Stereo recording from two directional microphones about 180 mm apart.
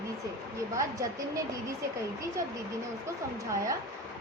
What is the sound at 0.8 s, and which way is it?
Speech, 20° right (ahead or behind).